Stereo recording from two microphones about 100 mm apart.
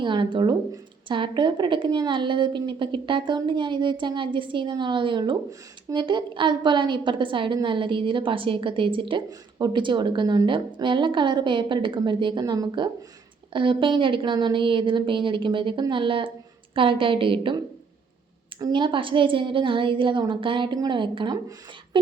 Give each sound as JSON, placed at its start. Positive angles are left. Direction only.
{"t": 0.0, "sound": "a woman's voice", "side_deg": -50}
{"t": 18.7, "sound": "a woman's voice", "side_deg": -55}